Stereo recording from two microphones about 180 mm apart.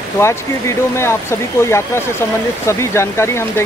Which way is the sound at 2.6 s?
15° left (ahead or behind).